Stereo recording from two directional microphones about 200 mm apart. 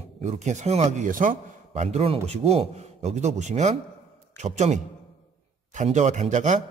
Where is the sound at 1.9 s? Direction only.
30° right (ahead or behind).